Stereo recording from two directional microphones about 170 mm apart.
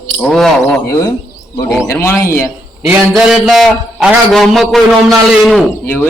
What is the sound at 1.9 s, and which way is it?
Speech, 15° left (ahead or behind).